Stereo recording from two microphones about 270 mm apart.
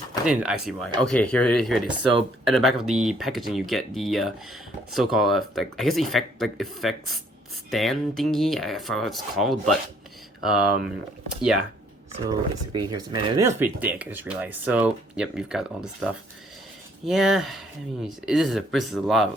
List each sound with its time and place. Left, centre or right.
0.3 s speech: centre
12.3 s speech: centre